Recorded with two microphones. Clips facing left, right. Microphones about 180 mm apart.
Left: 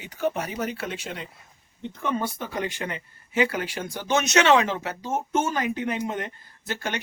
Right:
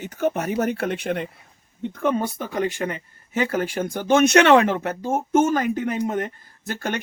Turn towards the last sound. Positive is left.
turn(degrees=-50)  # may be behind; listen again after turning